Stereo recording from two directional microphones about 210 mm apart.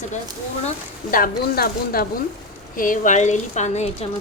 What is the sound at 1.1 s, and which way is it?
Speech, 45° left (ahead or behind).